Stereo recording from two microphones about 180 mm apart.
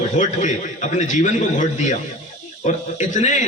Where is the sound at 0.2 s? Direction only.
45° left (ahead or behind).